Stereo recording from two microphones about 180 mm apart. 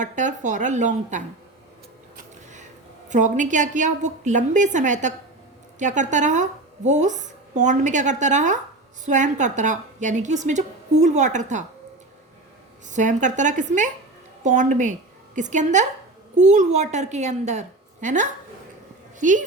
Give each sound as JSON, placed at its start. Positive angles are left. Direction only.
{"t": 0.0, "sound": "a woman's voice", "side_deg": -45}
{"t": 2.1, "sound": "a sound", "side_deg": -40}
{"t": 3.1, "sound": "a woman's voice", "side_deg": -45}
{"t": 12.9, "sound": "a woman's voice", "side_deg": -45}